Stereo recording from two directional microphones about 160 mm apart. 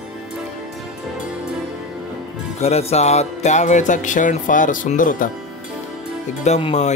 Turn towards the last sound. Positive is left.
turn(degrees=40)  # may be behind; listen again after turning